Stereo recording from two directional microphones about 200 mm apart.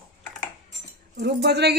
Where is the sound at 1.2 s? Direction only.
55° right (ahead or behind).